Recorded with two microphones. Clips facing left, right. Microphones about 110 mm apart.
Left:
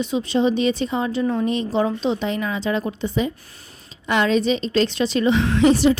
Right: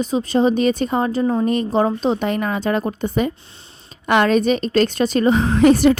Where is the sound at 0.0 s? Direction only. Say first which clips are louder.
Right 3 dB; 45° right (ahead or behind).